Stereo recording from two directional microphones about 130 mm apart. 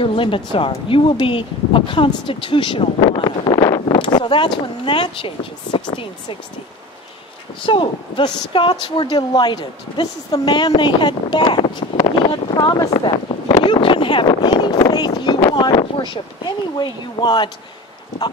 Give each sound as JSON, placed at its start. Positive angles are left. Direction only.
{"t": 0.0, "sound": "speech", "side_deg": 40}
{"t": 3.9, "sound": "a sound", "side_deg": 40}
{"t": 4.8, "sound": "speech", "side_deg": 40}
{"t": 7.6, "sound": "speech", "side_deg": 40}